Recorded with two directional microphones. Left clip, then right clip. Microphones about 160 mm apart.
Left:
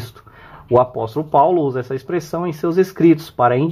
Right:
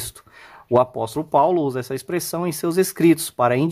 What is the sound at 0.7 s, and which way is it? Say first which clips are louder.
Speech: left 3 dB; 40° right (ahead or behind).